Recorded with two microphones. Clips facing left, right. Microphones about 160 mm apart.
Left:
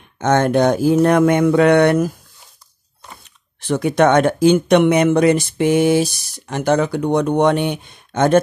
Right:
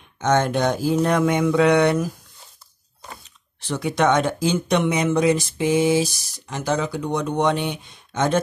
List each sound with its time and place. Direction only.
0.2 s speech: 55° left (ahead or behind)
3.6 s speech: 55° left (ahead or behind)